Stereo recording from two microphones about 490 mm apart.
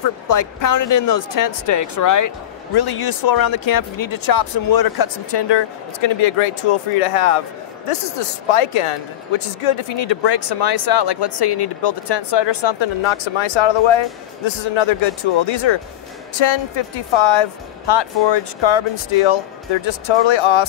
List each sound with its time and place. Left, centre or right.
0.0 s speech: left
5.9 s speech: left